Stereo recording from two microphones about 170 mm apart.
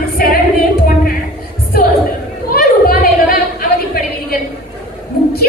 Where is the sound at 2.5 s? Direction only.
60° left (ahead or behind).